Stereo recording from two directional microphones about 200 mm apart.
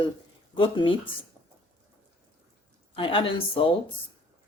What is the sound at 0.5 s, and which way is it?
Speech, 25° left (ahead or behind).